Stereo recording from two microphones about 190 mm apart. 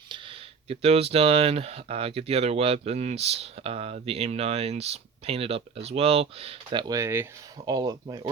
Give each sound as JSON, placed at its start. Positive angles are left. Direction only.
{"t": 0.1, "sound": "speech", "side_deg": -30}